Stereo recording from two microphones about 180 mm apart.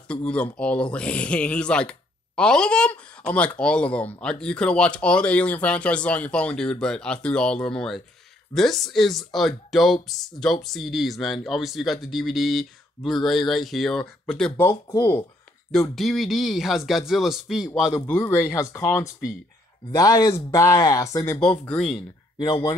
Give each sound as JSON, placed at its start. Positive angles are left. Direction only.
{"t": 0.1, "sound": "speech", "side_deg": 5}
{"t": 14.7, "sound": "speech", "side_deg": 15}
{"t": 15.7, "sound": "speech", "side_deg": 0}
{"t": 18.0, "sound": "speech", "side_deg": 10}
{"t": 21.4, "sound": "speech", "side_deg": 5}
{"t": 22.4, "sound": "speech", "side_deg": 20}